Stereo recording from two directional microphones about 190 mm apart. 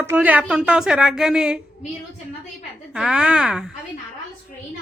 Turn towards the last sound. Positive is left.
turn(degrees=-5)  # may be behind; listen again after turning